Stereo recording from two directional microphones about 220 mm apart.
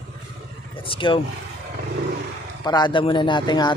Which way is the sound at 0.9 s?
25° left (ahead or behind).